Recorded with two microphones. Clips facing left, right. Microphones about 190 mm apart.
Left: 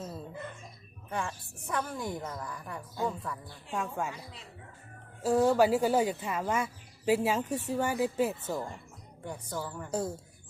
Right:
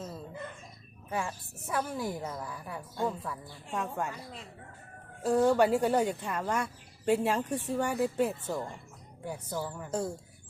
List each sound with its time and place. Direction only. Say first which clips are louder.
1.1 s speech: right 1 dB; 5° right (ahead or behind)
5.2 s speech: even; centre (ahead or behind)